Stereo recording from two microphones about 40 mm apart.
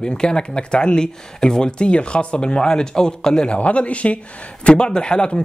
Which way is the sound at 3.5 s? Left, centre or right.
Left.